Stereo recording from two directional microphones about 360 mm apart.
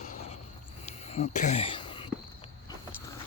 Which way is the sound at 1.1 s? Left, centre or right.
Centre.